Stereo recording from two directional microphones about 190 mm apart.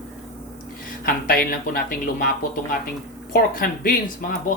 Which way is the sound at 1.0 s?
50° left (ahead or behind).